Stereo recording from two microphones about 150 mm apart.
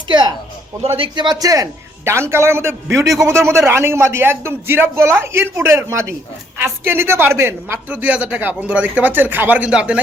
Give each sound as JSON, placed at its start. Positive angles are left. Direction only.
{"t": 0.1, "sound": "a man's voice", "side_deg": -30}